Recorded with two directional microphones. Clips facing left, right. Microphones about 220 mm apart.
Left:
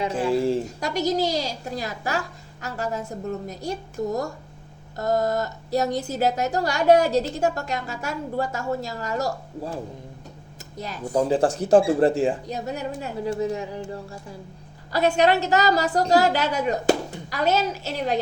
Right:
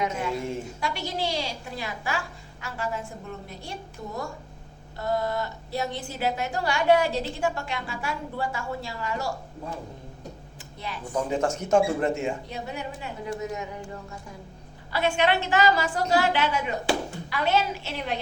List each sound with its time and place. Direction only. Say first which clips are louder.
0.0 s a woman's voice: left 6 dB; 30° left (ahead or behind)